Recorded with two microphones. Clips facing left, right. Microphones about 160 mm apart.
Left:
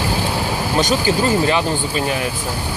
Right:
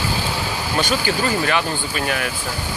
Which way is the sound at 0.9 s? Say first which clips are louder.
Left 4 dB; 25° left (ahead or behind).